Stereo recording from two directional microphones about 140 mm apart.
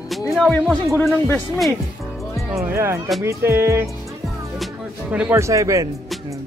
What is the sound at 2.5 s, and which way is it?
Speech, 20° right (ahead or behind).